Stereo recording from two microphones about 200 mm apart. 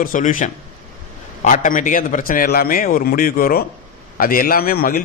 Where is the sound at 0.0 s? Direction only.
40° left (ahead or behind).